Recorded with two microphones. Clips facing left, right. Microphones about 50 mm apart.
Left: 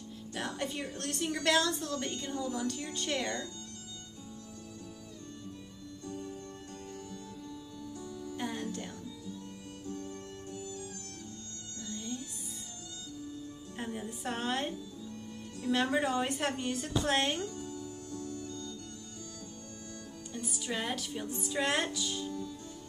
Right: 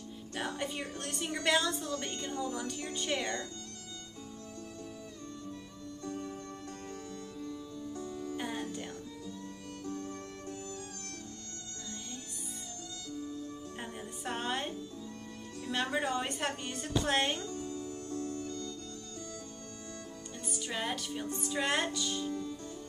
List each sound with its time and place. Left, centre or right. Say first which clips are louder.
0.3 s music: even; centre
0.9 s a woman's voice: left 2 dB; centre
6.0 s music: right 2 dB; right
7.9 s music: right 3 dB; right
8.4 s music: left 2 dB; centre
9.8 s music: right 1 dB; right
13.7 s music: left 3 dB; centre
15.7 s a sound: left 3 dB; centre
17.5 s music: right 2 dB; right
20.3 s speech: left 2 dB; centre